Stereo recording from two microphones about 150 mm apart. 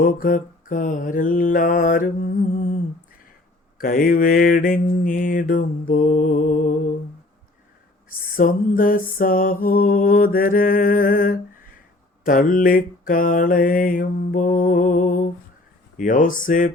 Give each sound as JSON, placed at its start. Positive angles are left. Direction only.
{"t": 0.0, "sound": "mantra", "side_deg": 70}
{"t": 3.8, "sound": "mantra", "side_deg": 75}
{"t": 8.4, "sound": "mantra", "side_deg": 70}